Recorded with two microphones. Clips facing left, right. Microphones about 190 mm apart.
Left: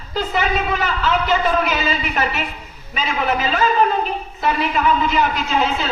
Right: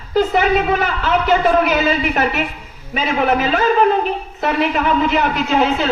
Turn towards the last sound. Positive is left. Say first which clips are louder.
# right 4 dB
turn(degrees=-60)  # may be behind; listen again after turning